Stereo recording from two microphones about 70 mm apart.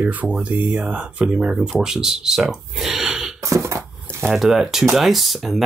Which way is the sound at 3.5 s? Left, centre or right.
Right.